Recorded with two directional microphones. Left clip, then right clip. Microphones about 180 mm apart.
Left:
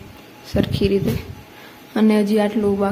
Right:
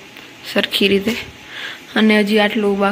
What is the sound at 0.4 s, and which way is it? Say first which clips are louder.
Speech: right 5 dB; centre (ahead or behind).